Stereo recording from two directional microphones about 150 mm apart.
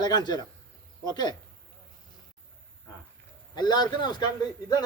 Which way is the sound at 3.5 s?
30° left (ahead or behind).